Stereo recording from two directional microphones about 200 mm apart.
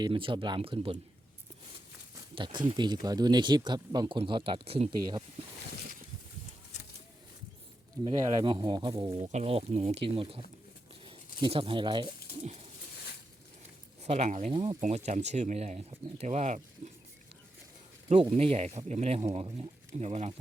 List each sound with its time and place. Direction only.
0.0 s speech: 25° right (ahead or behind)
2.3 s speech: 25° right (ahead or behind)
6.7 s a sound: 35° left (ahead or behind)
8.0 s speech: 25° right (ahead or behind)
14.0 s speech: 35° right (ahead or behind)
14.8 s speech: 35° right (ahead or behind)
18.1 s speech: 25° right (ahead or behind)